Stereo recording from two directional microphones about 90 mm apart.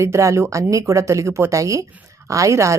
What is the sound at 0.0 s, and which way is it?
A woman's voice, 35° right (ahead or behind).